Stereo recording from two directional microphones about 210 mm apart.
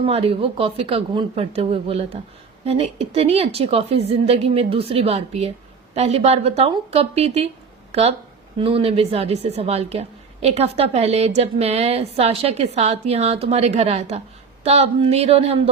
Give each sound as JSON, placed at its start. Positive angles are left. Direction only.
{"t": 0.0, "sound": "a woman's voice", "side_deg": -25}
{"t": 8.5, "sound": "a woman's voice", "side_deg": -25}